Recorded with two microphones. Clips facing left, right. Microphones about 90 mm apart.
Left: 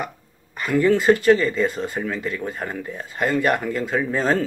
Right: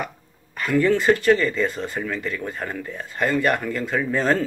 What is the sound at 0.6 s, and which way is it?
Speech, 10° left (ahead or behind).